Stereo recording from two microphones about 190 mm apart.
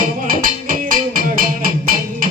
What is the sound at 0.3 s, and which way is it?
Music, 45° right (ahead or behind).